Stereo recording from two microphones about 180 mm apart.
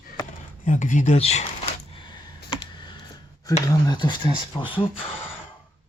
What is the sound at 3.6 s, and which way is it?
Speech, 20° left (ahead or behind).